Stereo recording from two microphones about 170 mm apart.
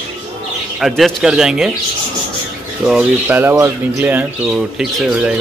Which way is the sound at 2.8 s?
10° right (ahead or behind).